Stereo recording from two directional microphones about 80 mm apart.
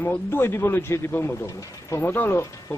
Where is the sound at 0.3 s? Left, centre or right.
Left.